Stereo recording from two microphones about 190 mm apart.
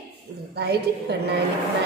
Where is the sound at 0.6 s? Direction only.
60° right (ahead or behind).